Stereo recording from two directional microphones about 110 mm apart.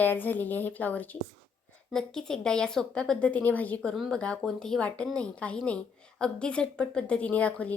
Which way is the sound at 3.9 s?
Centre (ahead or behind).